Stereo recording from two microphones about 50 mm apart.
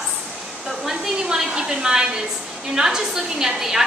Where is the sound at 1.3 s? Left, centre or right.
Centre.